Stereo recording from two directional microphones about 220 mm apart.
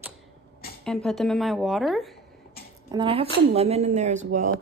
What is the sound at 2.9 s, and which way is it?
A woman's voice, 25° right (ahead or behind).